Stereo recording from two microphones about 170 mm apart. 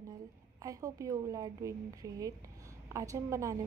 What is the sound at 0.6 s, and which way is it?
A woman's voice, 20° right (ahead or behind).